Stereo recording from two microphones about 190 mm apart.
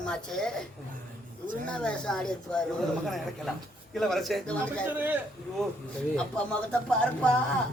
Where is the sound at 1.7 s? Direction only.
5° left (ahead or behind).